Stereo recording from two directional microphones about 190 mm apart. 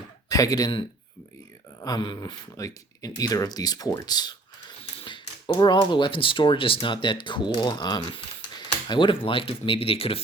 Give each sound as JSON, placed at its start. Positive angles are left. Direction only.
{"t": 0.3, "sound": "speech", "side_deg": 20}